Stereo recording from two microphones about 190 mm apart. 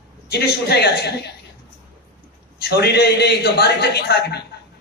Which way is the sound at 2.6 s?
60° left (ahead or behind).